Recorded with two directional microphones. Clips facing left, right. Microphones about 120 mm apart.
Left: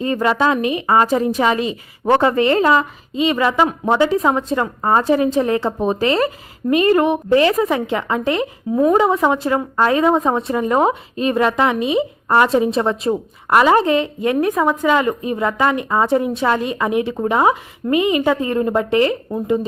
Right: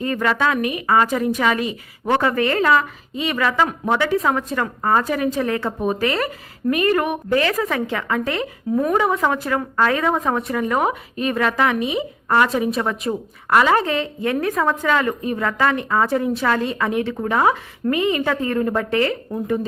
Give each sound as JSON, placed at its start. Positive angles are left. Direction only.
{"t": 0.0, "sound": "a woman's voice", "side_deg": 25}